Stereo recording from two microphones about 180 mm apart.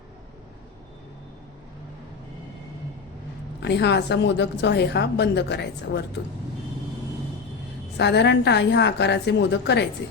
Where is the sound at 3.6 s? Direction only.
70° left (ahead or behind).